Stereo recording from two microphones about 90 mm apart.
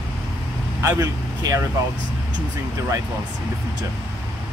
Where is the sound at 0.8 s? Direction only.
40° right (ahead or behind).